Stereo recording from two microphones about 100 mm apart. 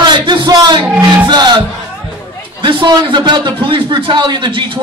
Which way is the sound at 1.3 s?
45° right (ahead or behind).